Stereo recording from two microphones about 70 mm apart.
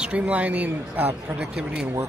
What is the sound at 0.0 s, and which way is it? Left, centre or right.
A man's voice, centre.